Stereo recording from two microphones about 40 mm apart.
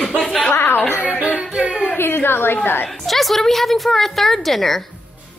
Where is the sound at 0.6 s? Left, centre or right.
Left.